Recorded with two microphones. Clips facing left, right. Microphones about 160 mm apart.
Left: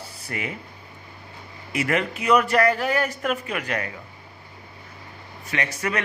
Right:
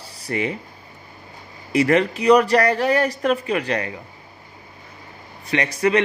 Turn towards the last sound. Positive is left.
turn(degrees=-30)  # may be behind; listen again after turning